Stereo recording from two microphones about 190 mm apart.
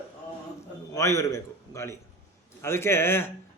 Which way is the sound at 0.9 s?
15° left (ahead or behind).